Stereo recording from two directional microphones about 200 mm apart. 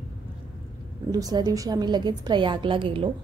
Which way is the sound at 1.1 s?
20° right (ahead or behind).